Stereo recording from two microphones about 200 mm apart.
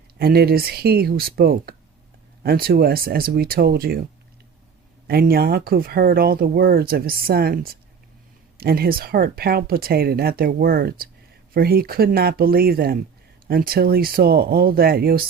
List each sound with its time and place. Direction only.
0.2 s speech: 50° right (ahead or behind)
5.0 s speech: 50° right (ahead or behind)